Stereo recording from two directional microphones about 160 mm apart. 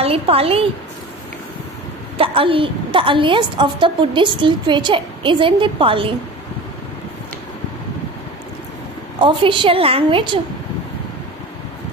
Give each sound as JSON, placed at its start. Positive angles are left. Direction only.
{"t": 0.0, "sound": "a woman's voice", "side_deg": -35}
{"t": 2.1, "sound": "a woman's voice", "side_deg": -35}
{"t": 9.2, "sound": "a woman's voice", "side_deg": -30}